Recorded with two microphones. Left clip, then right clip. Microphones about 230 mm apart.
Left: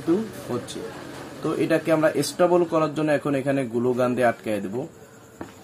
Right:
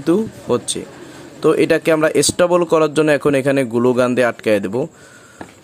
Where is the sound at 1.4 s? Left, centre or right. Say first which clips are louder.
Right 9 dB; right.